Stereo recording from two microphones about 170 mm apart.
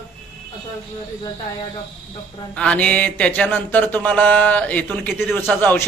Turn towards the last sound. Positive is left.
turn(degrees=10)  # may be behind; listen again after turning